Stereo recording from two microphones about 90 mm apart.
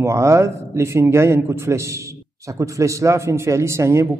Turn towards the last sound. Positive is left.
turn(degrees=-30)  # may be behind; listen again after turning